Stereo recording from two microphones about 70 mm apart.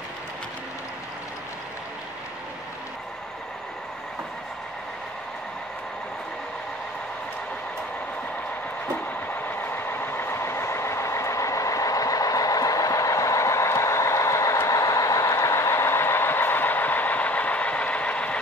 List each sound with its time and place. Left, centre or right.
9.5 s train: left